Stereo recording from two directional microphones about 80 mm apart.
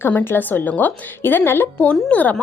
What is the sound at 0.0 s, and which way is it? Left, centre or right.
A woman's voice, left.